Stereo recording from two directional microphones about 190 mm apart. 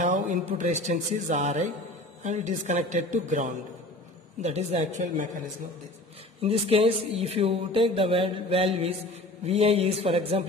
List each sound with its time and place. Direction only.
0.0 s speech: 40° right (ahead or behind)
6.4 s speech: 30° right (ahead or behind)